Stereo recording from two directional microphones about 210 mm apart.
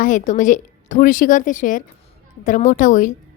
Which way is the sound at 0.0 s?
35° left (ahead or behind).